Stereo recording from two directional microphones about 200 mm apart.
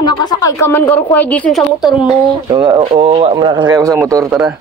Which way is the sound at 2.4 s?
25° right (ahead or behind).